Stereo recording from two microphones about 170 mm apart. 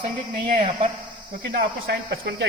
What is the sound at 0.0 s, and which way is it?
Speech, 50° right (ahead or behind).